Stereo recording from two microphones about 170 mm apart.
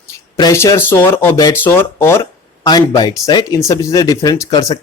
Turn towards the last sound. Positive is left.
turn(degrees=25)  # may be behind; listen again after turning